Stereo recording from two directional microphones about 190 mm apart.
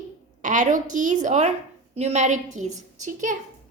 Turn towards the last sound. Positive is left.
turn(degrees=-40)  # may be behind; listen again after turning